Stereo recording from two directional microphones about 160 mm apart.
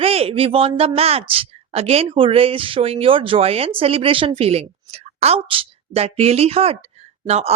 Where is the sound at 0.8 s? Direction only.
40° right (ahead or behind).